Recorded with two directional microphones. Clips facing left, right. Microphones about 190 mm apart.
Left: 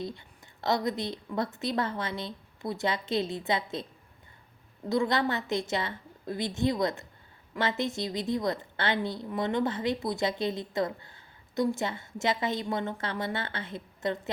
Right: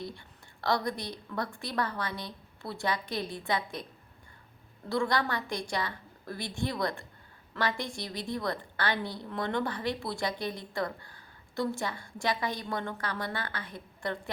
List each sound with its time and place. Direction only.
0.0 s a woman's voice: 20° left (ahead or behind)
4.9 s a woman's voice: 20° left (ahead or behind)